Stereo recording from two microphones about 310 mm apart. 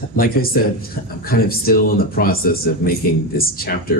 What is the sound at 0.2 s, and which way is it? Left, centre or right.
Speech, left.